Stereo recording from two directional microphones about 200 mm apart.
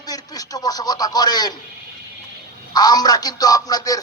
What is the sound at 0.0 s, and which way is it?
Speech, 20° left (ahead or behind).